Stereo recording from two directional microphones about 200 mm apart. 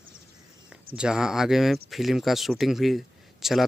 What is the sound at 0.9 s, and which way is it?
Speech, 5° right (ahead or behind).